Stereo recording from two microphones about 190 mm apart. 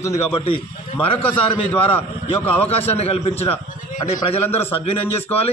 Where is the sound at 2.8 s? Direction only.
30° left (ahead or behind).